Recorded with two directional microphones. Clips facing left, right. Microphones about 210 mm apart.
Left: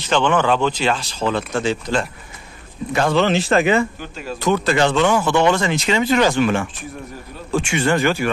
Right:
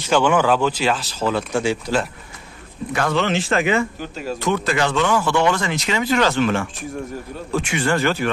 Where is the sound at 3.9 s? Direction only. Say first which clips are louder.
Right 3 dB; 40° right (ahead or behind).